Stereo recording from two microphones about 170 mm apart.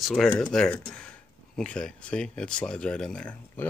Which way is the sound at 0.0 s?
Centre (ahead or behind).